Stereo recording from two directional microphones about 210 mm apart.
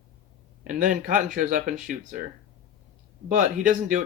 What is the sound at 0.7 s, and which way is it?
Speech, 40° right (ahead or behind).